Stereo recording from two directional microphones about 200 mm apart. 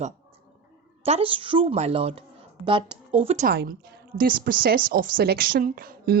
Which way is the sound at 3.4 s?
50° right (ahead or behind).